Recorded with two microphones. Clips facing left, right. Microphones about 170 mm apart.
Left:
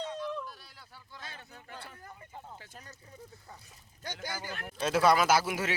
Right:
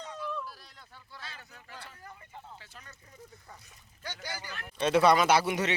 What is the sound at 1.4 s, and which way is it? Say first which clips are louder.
Speech: left 2 dB; 30° left (ahead or behind).